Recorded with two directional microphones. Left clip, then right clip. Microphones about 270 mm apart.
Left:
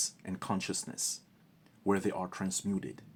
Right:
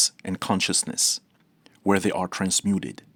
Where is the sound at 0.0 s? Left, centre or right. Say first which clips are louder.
Right 13 dB; right.